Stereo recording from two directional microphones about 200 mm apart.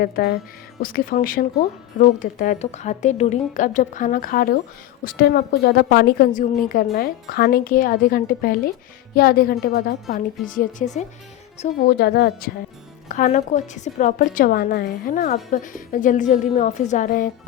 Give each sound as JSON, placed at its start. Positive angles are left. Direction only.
{"t": 0.0, "sound": "a woman's voice", "side_deg": 55}
{"t": 11.9, "sound": "a woman's voice", "side_deg": 50}
{"t": 13.1, "sound": "a woman's voice", "side_deg": 40}